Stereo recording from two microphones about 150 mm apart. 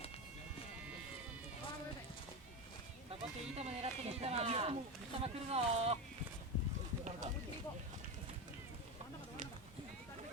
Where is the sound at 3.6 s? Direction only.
45° right (ahead or behind).